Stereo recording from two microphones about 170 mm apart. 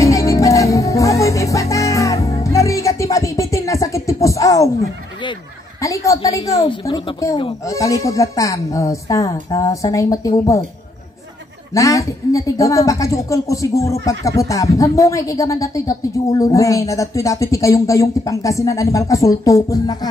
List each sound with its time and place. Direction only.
0.0 s music: 20° left (ahead or behind)
5.8 s speech: 20° left (ahead or behind)
11.7 s speech: 20° left (ahead or behind)